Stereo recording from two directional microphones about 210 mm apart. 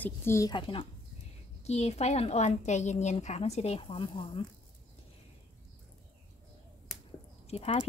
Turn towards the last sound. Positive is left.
turn(degrees=30)  # may be behind; listen again after turning